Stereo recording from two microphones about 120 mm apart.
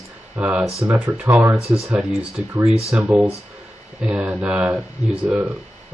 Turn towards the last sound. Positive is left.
turn(degrees=-10)  # may be behind; listen again after turning